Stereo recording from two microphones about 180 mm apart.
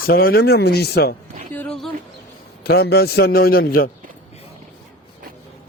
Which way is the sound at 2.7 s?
65° left (ahead or behind).